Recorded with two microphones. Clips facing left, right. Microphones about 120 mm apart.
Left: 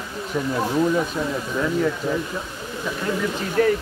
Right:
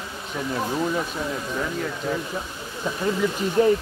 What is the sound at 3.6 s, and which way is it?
Speech, 20° right (ahead or behind).